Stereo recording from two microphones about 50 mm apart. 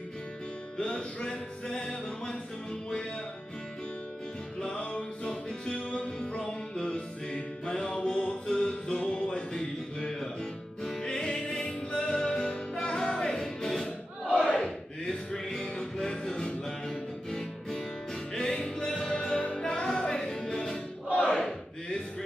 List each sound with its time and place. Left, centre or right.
0.7 s music: centre
4.7 s music: centre
21.3 s battle cry: centre